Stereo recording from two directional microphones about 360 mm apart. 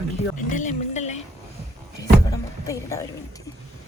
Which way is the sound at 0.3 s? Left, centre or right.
Left.